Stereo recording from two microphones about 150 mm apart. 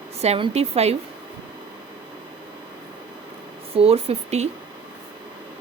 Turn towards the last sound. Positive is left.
turn(degrees=-45)  # may be behind; listen again after turning